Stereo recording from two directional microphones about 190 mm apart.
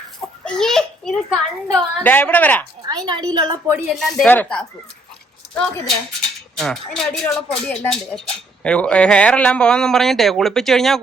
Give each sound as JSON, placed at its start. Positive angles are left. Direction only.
{"t": 0.4, "sound": "a child's voice", "side_deg": 5}
{"t": 2.8, "sound": "a woman's voice", "side_deg": -20}
{"t": 3.7, "sound": "a man's voice", "side_deg": 0}
{"t": 6.6, "sound": "a man's voice", "side_deg": 0}